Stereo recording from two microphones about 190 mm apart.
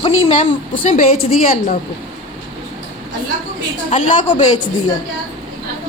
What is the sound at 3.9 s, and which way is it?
Speech, 40° left (ahead or behind).